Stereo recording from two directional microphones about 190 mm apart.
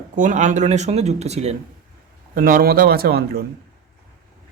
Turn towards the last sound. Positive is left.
turn(degrees=-55)  # may be behind; listen again after turning